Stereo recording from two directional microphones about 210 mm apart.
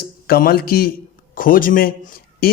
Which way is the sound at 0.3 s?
45° left (ahead or behind).